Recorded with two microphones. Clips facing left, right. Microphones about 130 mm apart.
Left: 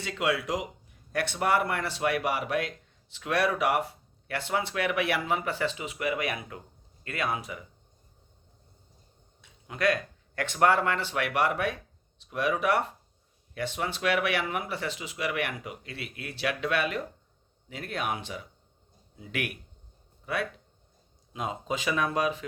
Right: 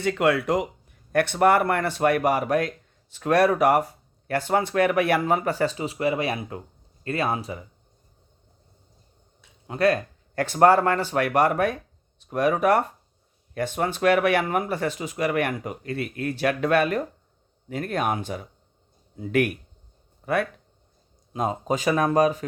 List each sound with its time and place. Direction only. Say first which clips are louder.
0.0 s speech: right 7 dB; 55° right (ahead or behind); by 7.6 s 30° right (ahead or behind)
9.6 s speech: right 6 dB; 35° right (ahead or behind); by 20.5 s 50° right (ahead or behind)
21.3 s speech: right 7 dB; 40° right (ahead or behind)